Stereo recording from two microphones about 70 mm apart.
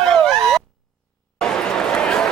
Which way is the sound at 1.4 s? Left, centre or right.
Centre.